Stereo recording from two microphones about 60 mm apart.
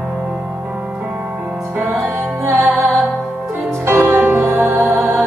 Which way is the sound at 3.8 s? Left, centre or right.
Right.